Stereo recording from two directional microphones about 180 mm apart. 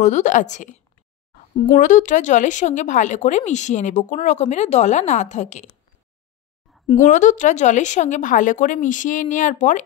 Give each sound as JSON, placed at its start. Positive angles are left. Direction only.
{"t": 0.0, "sound": "speech", "side_deg": 40}
{"t": 7.0, "sound": "speech", "side_deg": 45}